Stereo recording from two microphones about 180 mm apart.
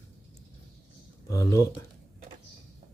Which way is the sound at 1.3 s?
20° left (ahead or behind).